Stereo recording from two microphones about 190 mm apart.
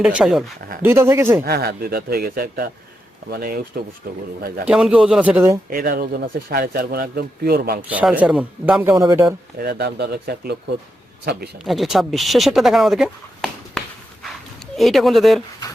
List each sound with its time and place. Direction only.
0.0 s speech: 5° right (ahead or behind)
1.5 s speech: 55° right (ahead or behind)
4.6 s speech: 5° right (ahead or behind)
5.7 s speech: 55° right (ahead or behind)
7.8 s speech: 5° right (ahead or behind)
9.6 s speech: 60° right (ahead or behind)
11.6 s speech: centre (ahead or behind)